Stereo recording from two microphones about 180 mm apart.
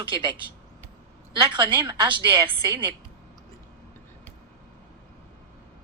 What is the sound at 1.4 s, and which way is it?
A woman's voice, 25° right (ahead or behind).